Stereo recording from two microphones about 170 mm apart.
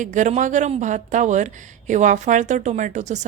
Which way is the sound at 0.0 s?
45° right (ahead or behind).